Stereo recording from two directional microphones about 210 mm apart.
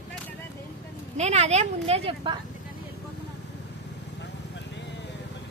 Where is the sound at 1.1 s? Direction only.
30° right (ahead or behind).